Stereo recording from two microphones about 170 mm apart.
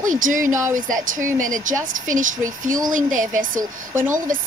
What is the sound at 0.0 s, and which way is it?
A woman's voice, 50° right (ahead or behind).